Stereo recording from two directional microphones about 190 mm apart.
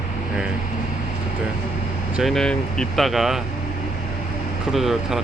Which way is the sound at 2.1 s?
Centre (ahead or behind).